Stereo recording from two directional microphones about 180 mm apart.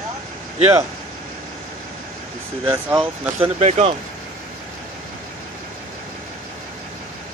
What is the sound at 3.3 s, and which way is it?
Speech, 35° right (ahead or behind).